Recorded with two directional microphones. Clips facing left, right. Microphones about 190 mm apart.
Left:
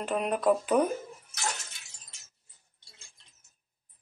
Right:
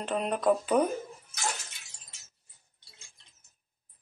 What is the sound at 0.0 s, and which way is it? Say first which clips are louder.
Speech: left 1 dB; 5° left (ahead or behind).